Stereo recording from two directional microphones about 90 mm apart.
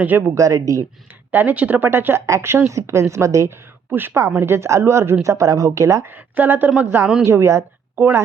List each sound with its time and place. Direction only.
0.0 s speech: 20° right (ahead or behind)
0.3 s a woman's voice: 35° right (ahead or behind)
1.3 s a woman's voice: 20° right (ahead or behind)
3.9 s a woman's voice: 25° right (ahead or behind)
6.1 s speech: 20° right (ahead or behind)
7.0 s speech: 10° right (ahead or behind)
7.3 s a woman's voice: 30° right (ahead or behind)